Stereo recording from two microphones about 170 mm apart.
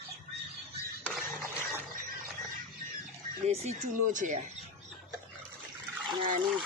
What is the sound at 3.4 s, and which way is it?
A man's voice, 40° right (ahead or behind).